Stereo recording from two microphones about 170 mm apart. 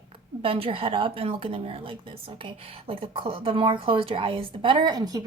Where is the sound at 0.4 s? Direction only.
35° right (ahead or behind).